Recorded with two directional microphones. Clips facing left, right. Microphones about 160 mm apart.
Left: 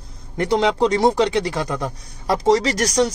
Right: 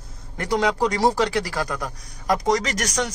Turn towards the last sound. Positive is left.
turn(degrees=30)  # may be behind; listen again after turning